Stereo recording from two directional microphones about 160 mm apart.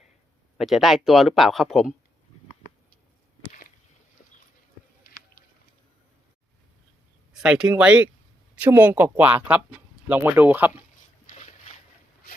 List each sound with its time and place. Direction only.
0.5 s speech: centre (ahead or behind)
7.3 s speech: 5° right (ahead or behind)
11.3 s a sound: 45° left (ahead or behind)